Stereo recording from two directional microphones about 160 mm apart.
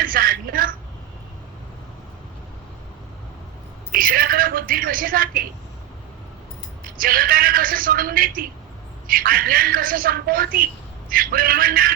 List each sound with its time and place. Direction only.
0.0 s a woman's voice: 65° right (ahead or behind)
3.9 s a sound: 65° right (ahead or behind)
6.8 s a woman's voice: 65° right (ahead or behind)